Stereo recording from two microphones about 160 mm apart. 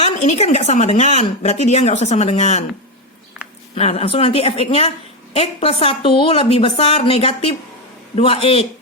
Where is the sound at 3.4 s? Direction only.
5° right (ahead or behind).